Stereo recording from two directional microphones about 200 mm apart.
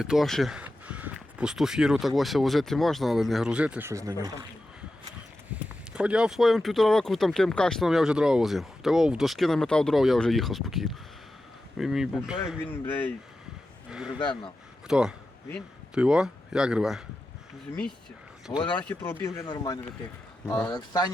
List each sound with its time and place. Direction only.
0.0 s speech: centre (ahead or behind)
5.9 s speech: 5° right (ahead or behind)
12.7 s speech: 10° left (ahead or behind)
14.1 s speech: 25° left (ahead or behind)
14.8 s speech: 5° right (ahead or behind)
18.5 s speech: 20° left (ahead or behind)
20.5 s speech: 5° left (ahead or behind)
20.7 s speech: 20° left (ahead or behind)